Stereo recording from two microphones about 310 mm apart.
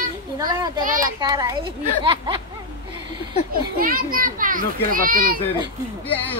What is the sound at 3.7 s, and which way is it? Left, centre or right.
A child's voice, right.